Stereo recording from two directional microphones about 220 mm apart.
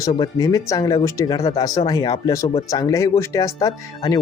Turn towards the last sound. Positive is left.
turn(degrees=15)  # may be behind; listen again after turning